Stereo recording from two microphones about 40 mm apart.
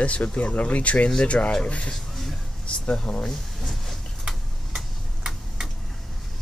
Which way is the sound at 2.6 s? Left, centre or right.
Left.